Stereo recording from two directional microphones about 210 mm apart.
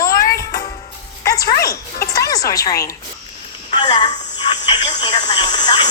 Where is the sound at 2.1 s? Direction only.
15° left (ahead or behind).